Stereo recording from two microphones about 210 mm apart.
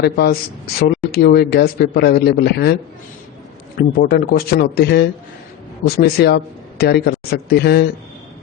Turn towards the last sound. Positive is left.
turn(degrees=50)  # may be behind; listen again after turning